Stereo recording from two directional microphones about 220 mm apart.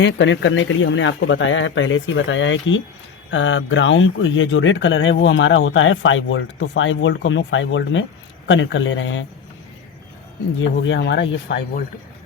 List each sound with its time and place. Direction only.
0.0 s speech: 55° left (ahead or behind)
10.6 s speech: 55° left (ahead or behind)